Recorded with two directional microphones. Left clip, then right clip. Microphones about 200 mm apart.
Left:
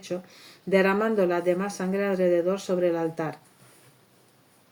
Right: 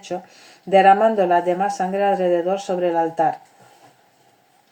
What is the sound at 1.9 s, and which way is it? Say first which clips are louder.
Speech: right 6 dB; 45° right (ahead or behind).